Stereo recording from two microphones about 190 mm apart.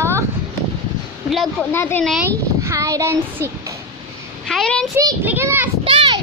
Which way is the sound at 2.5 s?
15° right (ahead or behind).